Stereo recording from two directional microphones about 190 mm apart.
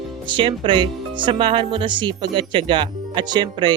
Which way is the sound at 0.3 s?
25° right (ahead or behind).